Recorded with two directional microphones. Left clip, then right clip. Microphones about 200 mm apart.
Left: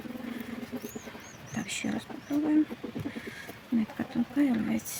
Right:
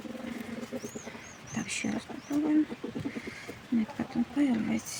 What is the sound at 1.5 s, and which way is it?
Speech, centre (ahead or behind).